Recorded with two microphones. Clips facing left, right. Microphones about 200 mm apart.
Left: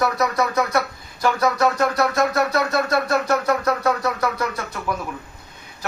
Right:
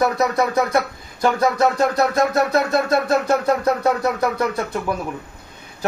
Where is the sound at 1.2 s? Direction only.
25° right (ahead or behind).